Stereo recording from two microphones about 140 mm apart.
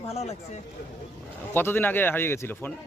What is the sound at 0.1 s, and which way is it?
Speech, 50° left (ahead or behind).